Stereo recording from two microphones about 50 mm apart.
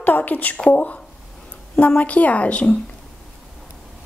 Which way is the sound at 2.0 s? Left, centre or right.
Left.